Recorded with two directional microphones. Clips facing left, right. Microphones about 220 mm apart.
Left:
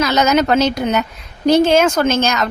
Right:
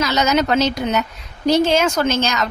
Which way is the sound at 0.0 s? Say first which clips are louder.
Left 3 dB; 50° left (ahead or behind).